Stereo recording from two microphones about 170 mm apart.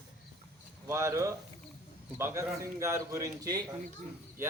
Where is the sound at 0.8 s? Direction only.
15° right (ahead or behind).